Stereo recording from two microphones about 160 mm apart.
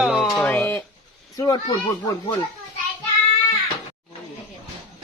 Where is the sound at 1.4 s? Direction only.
25° left (ahead or behind).